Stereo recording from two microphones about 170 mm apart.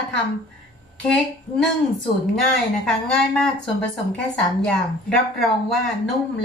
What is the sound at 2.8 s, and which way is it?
Speech, 5° left (ahead or behind).